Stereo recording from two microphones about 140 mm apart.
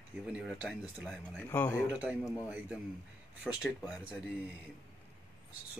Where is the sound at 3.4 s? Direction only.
5° right (ahead or behind).